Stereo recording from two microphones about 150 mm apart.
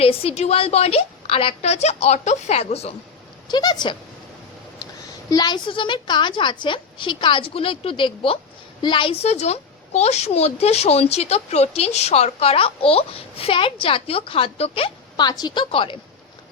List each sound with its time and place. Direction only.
0.0 s a woman's voice: 40° left (ahead or behind)
3.5 s speech: 30° left (ahead or behind)
5.3 s a woman's voice: 30° left (ahead or behind)